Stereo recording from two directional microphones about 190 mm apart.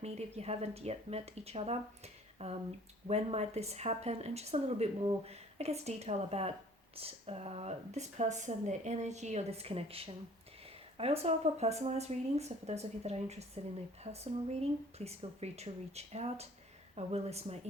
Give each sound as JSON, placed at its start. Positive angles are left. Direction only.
{"t": 0.0, "sound": "speech", "side_deg": -35}